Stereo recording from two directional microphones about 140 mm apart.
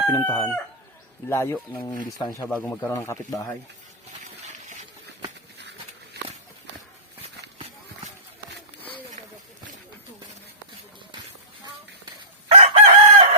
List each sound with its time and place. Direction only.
0.1 s speech: 15° left (ahead or behind)
2.0 s speech: 30° left (ahead or behind)
2.5 s speech: 10° left (ahead or behind)
4.4 s a sound: 60° right (ahead or behind)
7.2 s horse: 45° right (ahead or behind)
12.5 s chicken: 50° right (ahead or behind)